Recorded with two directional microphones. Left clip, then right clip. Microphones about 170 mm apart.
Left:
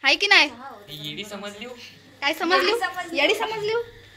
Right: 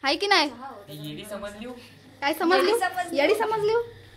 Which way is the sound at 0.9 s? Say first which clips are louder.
Left 5 dB; 70° right (ahead or behind).